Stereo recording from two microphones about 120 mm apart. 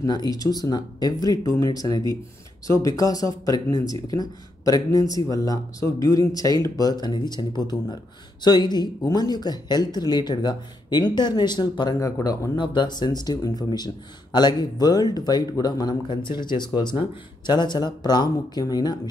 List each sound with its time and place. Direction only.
0.0 s speech: 35° left (ahead or behind)